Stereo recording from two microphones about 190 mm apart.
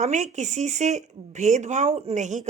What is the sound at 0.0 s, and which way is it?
A woman's voice, 40° right (ahead or behind).